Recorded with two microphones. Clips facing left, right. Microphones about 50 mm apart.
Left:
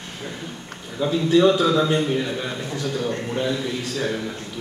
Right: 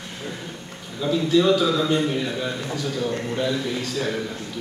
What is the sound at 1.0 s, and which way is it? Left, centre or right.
A man's voice, centre.